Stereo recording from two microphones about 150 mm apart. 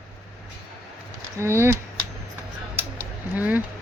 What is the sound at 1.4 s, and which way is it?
Speech, 15° right (ahead or behind).